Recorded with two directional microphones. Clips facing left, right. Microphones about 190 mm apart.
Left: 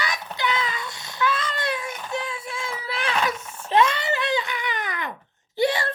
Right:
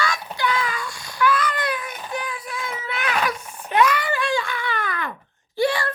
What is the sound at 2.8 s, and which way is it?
Baby cry, 30° left (ahead or behind).